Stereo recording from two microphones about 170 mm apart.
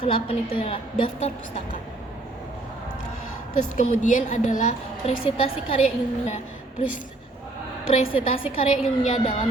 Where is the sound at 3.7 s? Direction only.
50° left (ahead or behind).